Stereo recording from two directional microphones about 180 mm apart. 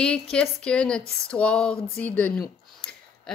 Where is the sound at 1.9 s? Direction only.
10° left (ahead or behind).